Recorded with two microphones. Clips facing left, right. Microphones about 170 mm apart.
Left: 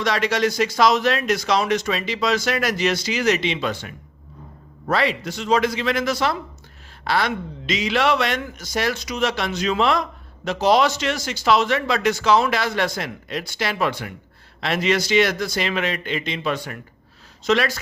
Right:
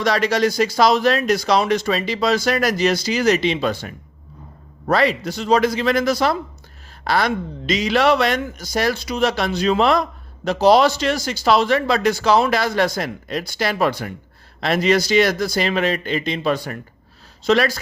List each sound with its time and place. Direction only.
0.0 s a man's voice: 35° right (ahead or behind)